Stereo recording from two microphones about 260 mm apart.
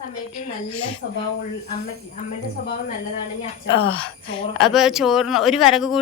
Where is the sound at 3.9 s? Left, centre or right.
Centre.